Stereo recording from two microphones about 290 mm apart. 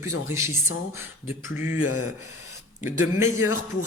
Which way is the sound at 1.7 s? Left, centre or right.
Left.